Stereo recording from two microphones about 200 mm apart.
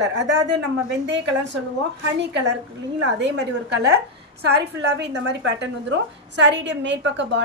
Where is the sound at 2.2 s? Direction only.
60° right (ahead or behind).